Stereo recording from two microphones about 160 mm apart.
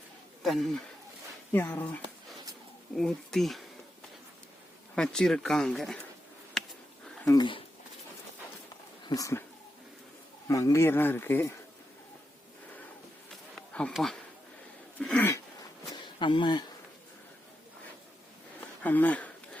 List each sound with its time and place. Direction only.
0.4 s speech: centre (ahead or behind)
4.9 s speech: 5° left (ahead or behind)
6.6 s a sound: centre (ahead or behind)
7.3 s speech: 30° left (ahead or behind)
9.0 s speech: 20° left (ahead or behind)
10.5 s speech: 20° left (ahead or behind)
13.6 s speech: 5° left (ahead or behind)
14.9 s throat clearing: 10° left (ahead or behind)
16.1 s speech: 30° left (ahead or behind)
18.8 s speech: 10° left (ahead or behind)